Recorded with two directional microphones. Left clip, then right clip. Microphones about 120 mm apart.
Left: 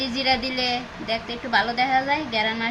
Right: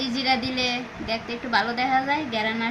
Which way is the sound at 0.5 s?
55° right (ahead or behind).